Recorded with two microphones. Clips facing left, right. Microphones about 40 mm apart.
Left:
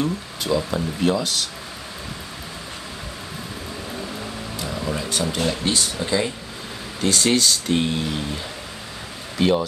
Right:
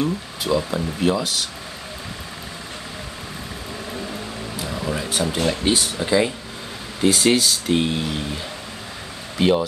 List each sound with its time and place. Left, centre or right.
0.0 s speech: centre
4.6 s speech: centre
9.4 s speech: centre